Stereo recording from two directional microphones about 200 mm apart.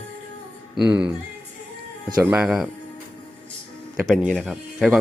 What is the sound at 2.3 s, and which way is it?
Speech, centre (ahead or behind).